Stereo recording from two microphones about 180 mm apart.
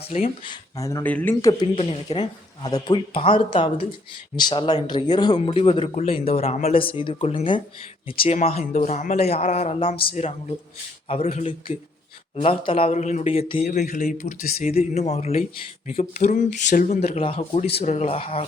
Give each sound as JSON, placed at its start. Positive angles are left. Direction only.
{"t": 0.1, "sound": "speech", "side_deg": 35}
{"t": 0.5, "sound": "speech", "side_deg": 20}
{"t": 1.7, "sound": "speech", "side_deg": 30}
{"t": 14.7, "sound": "speech", "side_deg": 35}